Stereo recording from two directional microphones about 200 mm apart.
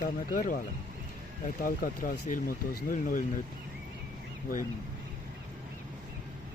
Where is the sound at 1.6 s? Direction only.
45° left (ahead or behind).